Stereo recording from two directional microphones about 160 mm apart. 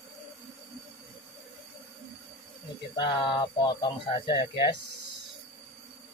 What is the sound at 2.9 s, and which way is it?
Speech, 30° left (ahead or behind).